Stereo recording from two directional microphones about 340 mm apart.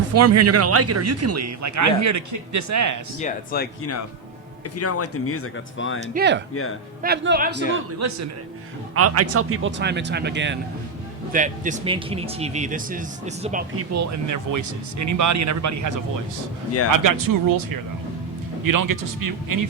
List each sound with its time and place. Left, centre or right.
0.1 s speech: right
3.2 s speech: left
4.8 s speech: left
6.1 s speech: right
6.5 s speech: left
7.0 s speech: right
7.9 s speech: right
13.7 s speech: right